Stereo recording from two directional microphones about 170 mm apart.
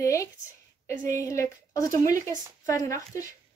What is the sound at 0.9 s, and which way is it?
Speech, 50° right (ahead or behind).